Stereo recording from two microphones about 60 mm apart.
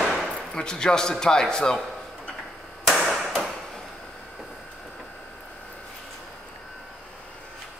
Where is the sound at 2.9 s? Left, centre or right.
Centre.